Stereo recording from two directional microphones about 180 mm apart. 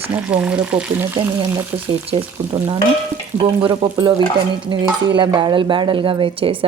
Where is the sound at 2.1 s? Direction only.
25° right (ahead or behind).